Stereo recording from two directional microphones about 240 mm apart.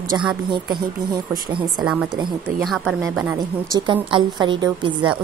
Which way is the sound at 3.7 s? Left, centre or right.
Centre.